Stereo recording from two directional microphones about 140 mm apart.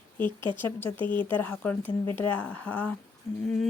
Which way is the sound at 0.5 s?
15° left (ahead or behind).